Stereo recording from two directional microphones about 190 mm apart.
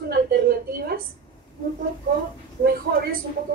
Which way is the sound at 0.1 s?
55° right (ahead or behind).